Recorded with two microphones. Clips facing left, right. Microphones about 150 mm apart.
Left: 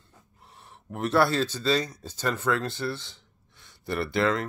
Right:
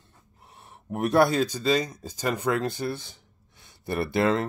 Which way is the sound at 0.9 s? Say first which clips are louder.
Right 2 dB; 15° right (ahead or behind).